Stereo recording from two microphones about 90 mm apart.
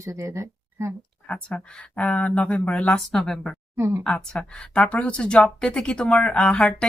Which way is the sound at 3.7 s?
30° right (ahead or behind).